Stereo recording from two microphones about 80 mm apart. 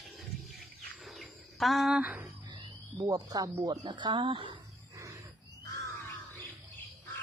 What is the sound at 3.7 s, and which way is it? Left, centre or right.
Speech, right.